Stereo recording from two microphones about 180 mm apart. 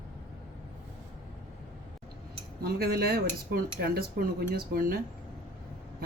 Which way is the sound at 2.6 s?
60° right (ahead or behind).